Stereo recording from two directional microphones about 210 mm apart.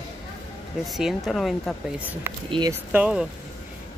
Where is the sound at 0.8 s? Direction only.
Centre (ahead or behind).